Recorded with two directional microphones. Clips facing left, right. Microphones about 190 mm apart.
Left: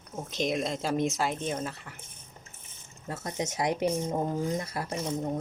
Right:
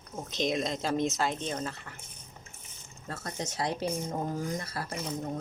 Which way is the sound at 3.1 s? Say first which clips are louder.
Left 4 dB; 15° left (ahead or behind).